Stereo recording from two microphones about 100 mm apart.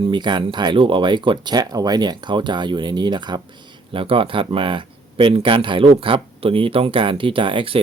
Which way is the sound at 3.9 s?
60° right (ahead or behind).